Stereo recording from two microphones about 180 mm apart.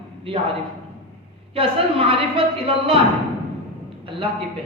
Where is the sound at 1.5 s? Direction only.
30° right (ahead or behind).